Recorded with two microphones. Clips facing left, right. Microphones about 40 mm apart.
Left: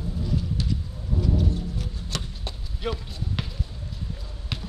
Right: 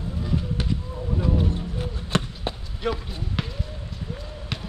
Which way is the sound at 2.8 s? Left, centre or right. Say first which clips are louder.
Right 3 dB; centre.